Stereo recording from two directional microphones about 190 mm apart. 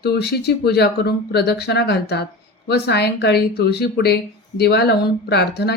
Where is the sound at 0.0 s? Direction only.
60° left (ahead or behind).